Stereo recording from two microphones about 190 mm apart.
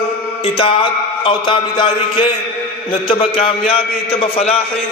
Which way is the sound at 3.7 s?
30° left (ahead or behind).